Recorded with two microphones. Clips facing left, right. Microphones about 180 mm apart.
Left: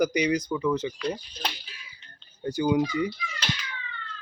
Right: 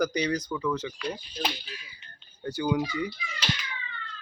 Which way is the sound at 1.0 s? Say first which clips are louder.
Left 2 dB; 5° right (ahead or behind).